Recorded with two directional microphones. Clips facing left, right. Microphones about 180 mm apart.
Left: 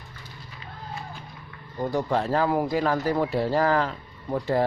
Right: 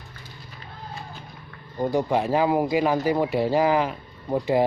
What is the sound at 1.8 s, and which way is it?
Speech, 15° right (ahead or behind).